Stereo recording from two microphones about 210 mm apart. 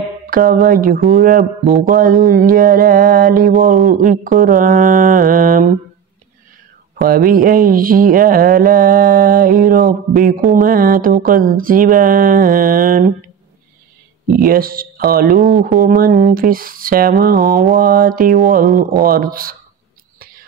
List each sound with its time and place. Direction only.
0.3 s speech: 40° right (ahead or behind)
7.0 s speech: 45° right (ahead or behind)
14.4 s speech: 45° right (ahead or behind)